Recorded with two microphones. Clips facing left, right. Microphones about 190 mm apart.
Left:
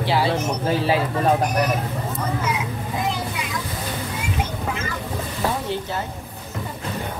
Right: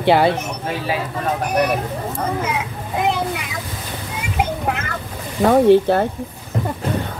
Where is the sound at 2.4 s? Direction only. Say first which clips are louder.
Right 1 dB; 60° right (ahead or behind).